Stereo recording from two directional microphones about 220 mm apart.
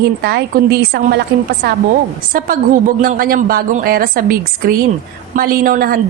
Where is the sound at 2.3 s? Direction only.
40° right (ahead or behind).